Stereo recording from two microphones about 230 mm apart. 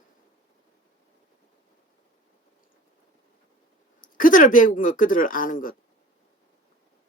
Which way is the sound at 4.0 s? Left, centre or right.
Left.